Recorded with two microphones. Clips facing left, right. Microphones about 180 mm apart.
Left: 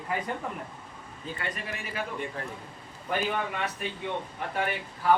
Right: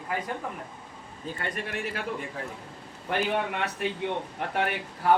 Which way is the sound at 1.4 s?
65° right (ahead or behind).